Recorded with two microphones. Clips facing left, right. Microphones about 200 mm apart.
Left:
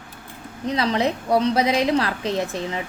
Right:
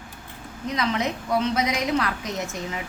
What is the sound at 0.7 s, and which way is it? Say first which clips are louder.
A woman's voice: left 4 dB; 30° left (ahead or behind).